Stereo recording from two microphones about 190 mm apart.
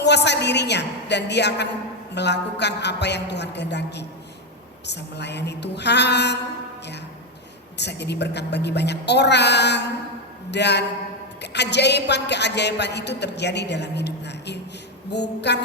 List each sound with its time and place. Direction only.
0.0 s speech: 65° left (ahead or behind)
7.8 s speech: 65° left (ahead or behind)